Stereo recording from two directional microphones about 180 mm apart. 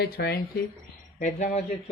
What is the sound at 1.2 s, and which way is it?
Speech, 40° left (ahead or behind).